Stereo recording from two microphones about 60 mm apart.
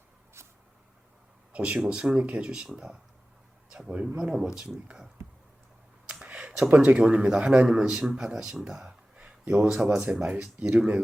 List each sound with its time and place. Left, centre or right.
0.4 s vehicle: right
1.5 s a man's voice: right
6.1 s a sound: centre
6.7 s a man's voice: centre